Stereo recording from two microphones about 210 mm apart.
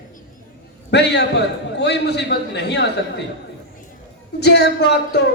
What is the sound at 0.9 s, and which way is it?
A man's voice, 55° left (ahead or behind).